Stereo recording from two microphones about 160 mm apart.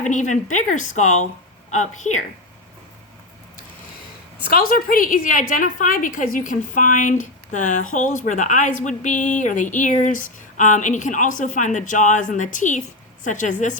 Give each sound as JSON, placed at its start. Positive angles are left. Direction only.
{"t": 0.0, "sound": "a woman's voice", "side_deg": 50}
{"t": 4.5, "sound": "a woman's voice", "side_deg": 60}